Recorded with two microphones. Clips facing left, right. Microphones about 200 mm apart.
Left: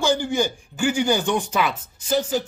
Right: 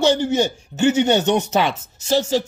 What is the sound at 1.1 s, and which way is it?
Speech, 75° right (ahead or behind).